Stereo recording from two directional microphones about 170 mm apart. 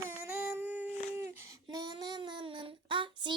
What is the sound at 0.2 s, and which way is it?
Child singing, 10° right (ahead or behind).